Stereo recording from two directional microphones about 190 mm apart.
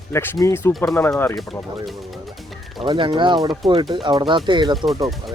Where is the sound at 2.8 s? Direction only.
25° right (ahead or behind).